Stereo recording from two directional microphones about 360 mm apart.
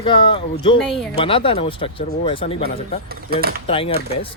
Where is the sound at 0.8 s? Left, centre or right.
Centre.